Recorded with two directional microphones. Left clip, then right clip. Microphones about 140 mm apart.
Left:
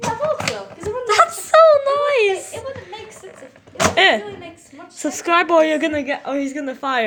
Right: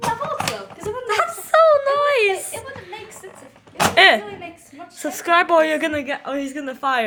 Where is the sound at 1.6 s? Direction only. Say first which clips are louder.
Left 2 dB; centre (ahead or behind).